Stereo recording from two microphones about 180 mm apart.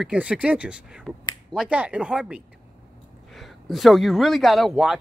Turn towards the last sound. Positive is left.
turn(degrees=0)  # may be behind; listen again after turning